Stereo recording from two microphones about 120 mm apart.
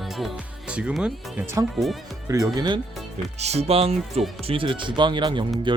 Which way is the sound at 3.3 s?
65° right (ahead or behind).